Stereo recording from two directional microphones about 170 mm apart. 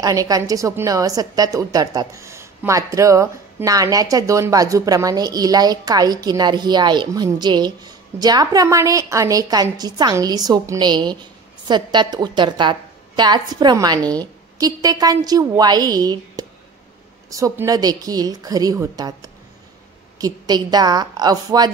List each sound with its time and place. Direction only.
0.0 s a woman's voice: 20° right (ahead or behind)
20.2 s a woman's voice: 20° right (ahead or behind)